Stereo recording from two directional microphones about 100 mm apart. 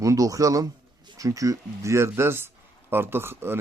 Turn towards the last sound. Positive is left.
turn(degrees=-25)  # may be behind; listen again after turning